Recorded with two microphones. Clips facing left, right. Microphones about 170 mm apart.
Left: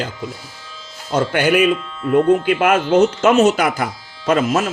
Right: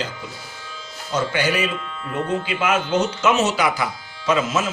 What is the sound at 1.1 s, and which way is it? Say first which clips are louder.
Speech: left 6 dB; 55° left (ahead or behind).